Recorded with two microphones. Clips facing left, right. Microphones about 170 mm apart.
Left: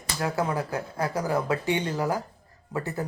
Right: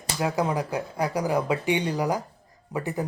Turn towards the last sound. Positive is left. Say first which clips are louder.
# right 2 dB
turn(degrees=-15)  # may be behind; listen again after turning